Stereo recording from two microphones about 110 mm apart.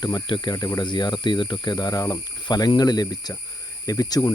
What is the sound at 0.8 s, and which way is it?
Speech, 40° left (ahead or behind).